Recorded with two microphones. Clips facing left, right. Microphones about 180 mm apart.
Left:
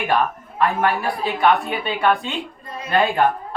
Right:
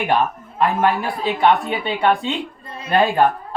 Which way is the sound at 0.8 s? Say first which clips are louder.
Right 2 dB; 25° right (ahead or behind).